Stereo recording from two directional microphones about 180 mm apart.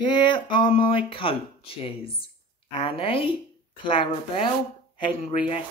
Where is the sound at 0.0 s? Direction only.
25° left (ahead or behind).